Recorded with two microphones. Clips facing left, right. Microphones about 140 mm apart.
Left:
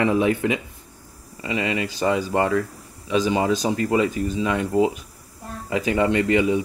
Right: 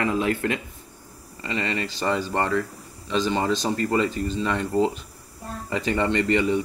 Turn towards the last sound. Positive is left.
turn(degrees=10)  # may be behind; listen again after turning